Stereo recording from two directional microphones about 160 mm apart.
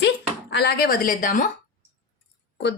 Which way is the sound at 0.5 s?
85° left.